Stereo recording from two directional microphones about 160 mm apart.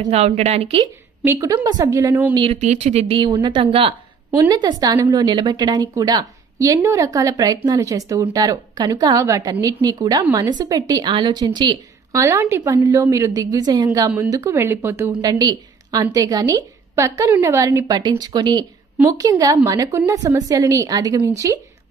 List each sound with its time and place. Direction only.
0.1 s a woman's voice: 40° right (ahead or behind)
1.2 s a woman's voice: 20° right (ahead or behind)
2.3 s a woman's voice: 35° right (ahead or behind)